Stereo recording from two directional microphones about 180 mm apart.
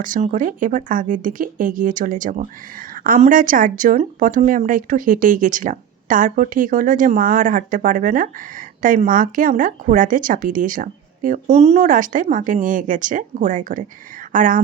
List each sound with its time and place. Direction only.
0.0 s speech: 45° right (ahead or behind)